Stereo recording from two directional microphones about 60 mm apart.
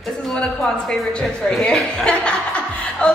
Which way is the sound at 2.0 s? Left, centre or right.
Centre.